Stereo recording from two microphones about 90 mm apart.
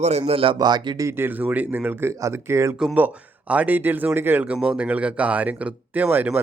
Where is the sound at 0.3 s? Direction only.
90° right.